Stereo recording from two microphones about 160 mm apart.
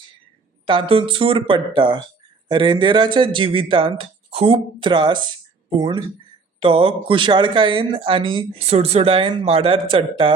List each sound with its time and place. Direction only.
0.7 s speech: 35° right (ahead or behind)